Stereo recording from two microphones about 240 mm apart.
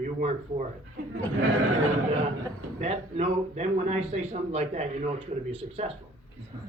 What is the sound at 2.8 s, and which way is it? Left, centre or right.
A man's voice, right.